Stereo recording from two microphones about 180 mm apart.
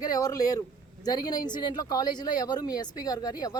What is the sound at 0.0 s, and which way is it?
Speech, 20° left (ahead or behind).